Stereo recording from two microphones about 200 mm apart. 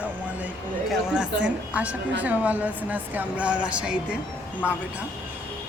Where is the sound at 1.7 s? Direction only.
5° right (ahead or behind).